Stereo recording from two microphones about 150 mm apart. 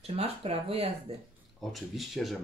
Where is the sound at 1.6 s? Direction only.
Centre (ahead or behind).